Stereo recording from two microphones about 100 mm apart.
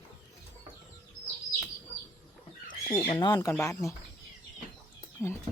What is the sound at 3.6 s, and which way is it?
Speech, 30° left (ahead or behind).